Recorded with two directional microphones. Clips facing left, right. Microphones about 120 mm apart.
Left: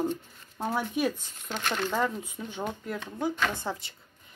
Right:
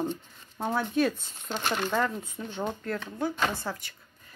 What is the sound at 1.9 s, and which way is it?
A woman's voice, 15° left (ahead or behind).